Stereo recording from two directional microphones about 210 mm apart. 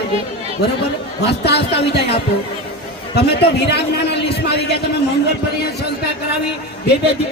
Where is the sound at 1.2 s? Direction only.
50° left (ahead or behind).